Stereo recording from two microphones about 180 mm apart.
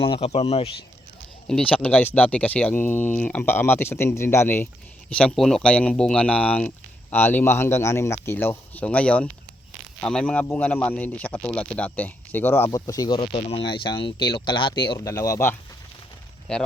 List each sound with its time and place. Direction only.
0.3 s speech: 35° left (ahead or behind)
1.7 s speech: 10° left (ahead or behind)